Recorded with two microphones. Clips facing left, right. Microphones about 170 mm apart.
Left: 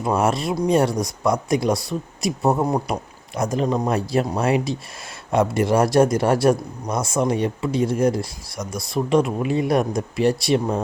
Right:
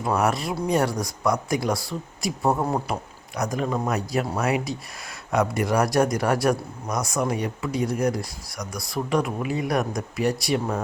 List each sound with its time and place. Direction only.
0.0 s speech: 25° left (ahead or behind)
3.3 s speech: 25° left (ahead or behind)